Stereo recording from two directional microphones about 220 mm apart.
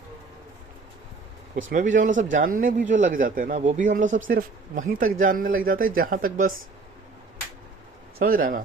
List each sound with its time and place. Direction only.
1.7 s a man's voice: 35° right (ahead or behind)
8.2 s a man's voice: 40° right (ahead or behind)